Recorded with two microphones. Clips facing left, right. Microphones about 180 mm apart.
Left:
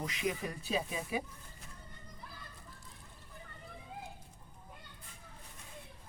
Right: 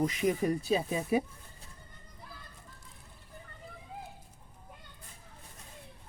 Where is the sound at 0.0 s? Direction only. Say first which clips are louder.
Right 8 dB; 45° right (ahead or behind).